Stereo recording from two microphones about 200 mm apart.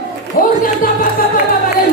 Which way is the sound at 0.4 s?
45° left (ahead or behind).